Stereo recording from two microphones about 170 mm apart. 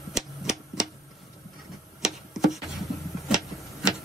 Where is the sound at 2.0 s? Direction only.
Centre (ahead or behind).